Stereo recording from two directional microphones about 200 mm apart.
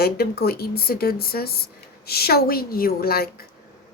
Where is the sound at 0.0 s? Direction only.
50° left (ahead or behind).